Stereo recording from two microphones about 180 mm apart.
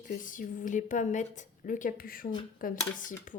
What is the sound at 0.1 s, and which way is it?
A woman's voice, 45° left (ahead or behind).